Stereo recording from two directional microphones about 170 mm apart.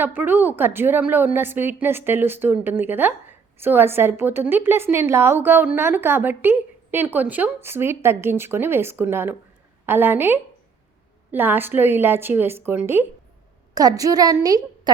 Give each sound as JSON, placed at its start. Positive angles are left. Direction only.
{"t": 0.0, "sound": "a woman's voice", "side_deg": -10}